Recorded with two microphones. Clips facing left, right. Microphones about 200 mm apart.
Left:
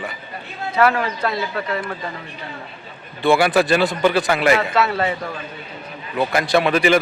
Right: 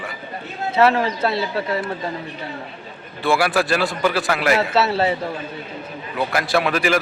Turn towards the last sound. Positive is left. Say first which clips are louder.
# left 3 dB
turn(degrees=0)  # may be behind; listen again after turning